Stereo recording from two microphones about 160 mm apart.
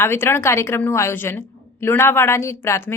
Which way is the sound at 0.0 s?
15° left (ahead or behind).